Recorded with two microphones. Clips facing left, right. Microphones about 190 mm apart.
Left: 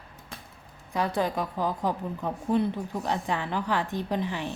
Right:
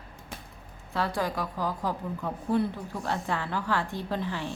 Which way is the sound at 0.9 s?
20° left (ahead or behind).